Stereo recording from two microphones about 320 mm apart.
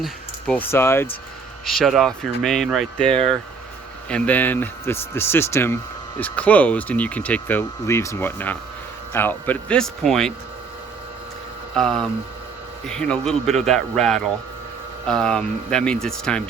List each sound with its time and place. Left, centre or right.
0.0 s speech: centre
4.1 s speech: centre
11.7 s speech: centre